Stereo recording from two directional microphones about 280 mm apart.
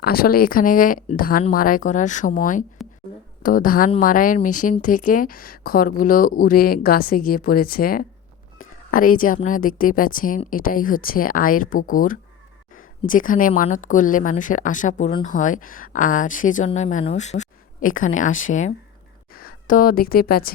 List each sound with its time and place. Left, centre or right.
0.0 s a woman's voice: left